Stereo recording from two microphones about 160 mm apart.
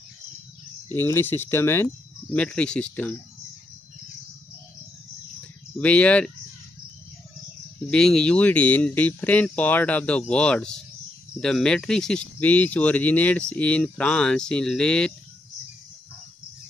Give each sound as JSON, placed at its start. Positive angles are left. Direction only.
{"t": 0.9, "sound": "speech", "side_deg": 15}
{"t": 5.8, "sound": "speech", "side_deg": 10}
{"t": 7.9, "sound": "speech", "side_deg": 5}